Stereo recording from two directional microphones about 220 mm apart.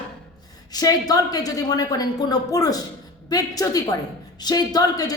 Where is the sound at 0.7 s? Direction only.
15° left (ahead or behind).